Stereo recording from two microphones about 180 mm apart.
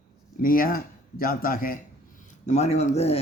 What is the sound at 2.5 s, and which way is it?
Speech, 40° left (ahead or behind).